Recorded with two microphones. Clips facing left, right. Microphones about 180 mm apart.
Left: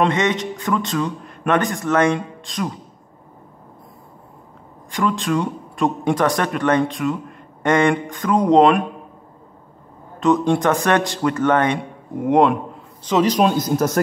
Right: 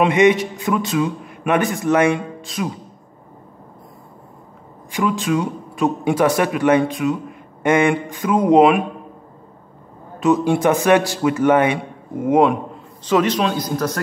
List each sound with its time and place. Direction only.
0.0 s speech: 10° right (ahead or behind)
4.9 s speech: 5° right (ahead or behind)
10.2 s speech: 5° right (ahead or behind)
13.2 s a man's voice: 45° left (ahead or behind)